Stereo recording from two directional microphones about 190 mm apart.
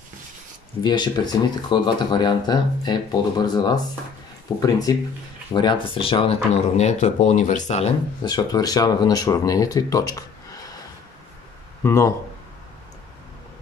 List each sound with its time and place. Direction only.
0.8 s speech: 20° left (ahead or behind)
8.2 s speech: 20° left (ahead or behind)
11.8 s speech: 15° left (ahead or behind)